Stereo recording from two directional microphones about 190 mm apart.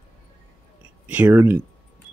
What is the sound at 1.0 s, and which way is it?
Speech, 10° right (ahead or behind).